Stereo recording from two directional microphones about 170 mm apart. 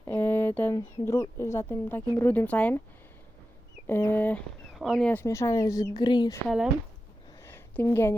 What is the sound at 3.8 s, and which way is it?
Speech, 15° left (ahead or behind).